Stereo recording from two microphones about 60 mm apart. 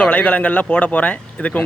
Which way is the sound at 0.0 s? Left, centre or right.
Left.